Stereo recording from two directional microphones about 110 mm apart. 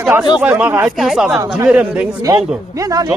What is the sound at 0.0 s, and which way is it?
Speech, 10° right (ahead or behind).